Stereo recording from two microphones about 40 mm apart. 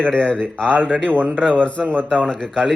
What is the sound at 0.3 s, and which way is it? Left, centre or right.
Speech, left.